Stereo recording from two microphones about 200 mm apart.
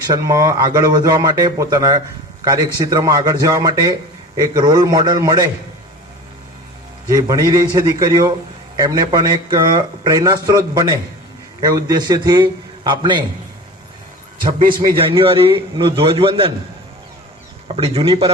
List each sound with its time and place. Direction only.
0.1 s speech: 15° right (ahead or behind)
7.1 s a man's voice: 15° right (ahead or behind)
14.3 s a man's voice: 45° right (ahead or behind)
14.9 s speech: 25° right (ahead or behind)
17.7 s speech: 30° right (ahead or behind)